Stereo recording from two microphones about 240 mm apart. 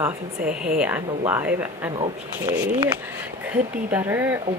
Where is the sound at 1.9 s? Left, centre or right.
Centre.